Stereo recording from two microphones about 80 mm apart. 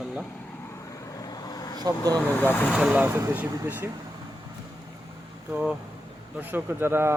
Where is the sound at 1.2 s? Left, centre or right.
Left.